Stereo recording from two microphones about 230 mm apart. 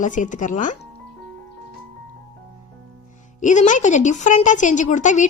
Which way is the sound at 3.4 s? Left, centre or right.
Left.